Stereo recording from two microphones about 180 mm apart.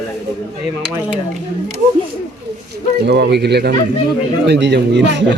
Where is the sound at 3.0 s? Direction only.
65° right (ahead or behind).